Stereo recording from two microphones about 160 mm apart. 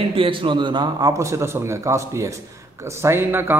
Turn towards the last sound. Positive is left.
turn(degrees=-15)  # may be behind; listen again after turning